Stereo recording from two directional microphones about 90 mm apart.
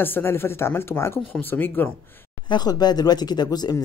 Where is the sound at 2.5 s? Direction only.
50° left (ahead or behind).